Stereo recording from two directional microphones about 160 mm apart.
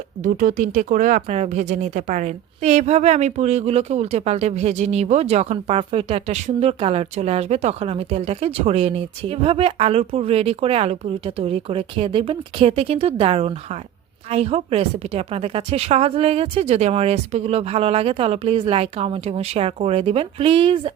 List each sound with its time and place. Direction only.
0.2 s speech: 55° right (ahead or behind); by 20.9 s 35° right (ahead or behind)